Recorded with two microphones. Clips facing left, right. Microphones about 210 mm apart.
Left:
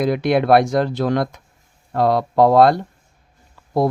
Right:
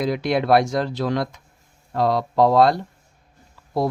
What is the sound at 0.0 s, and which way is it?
Speech, 55° left (ahead or behind).